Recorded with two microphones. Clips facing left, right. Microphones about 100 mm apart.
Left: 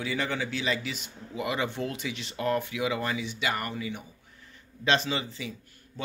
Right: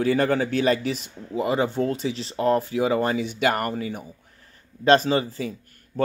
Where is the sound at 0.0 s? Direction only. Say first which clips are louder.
Right 10 dB; 45° right (ahead or behind).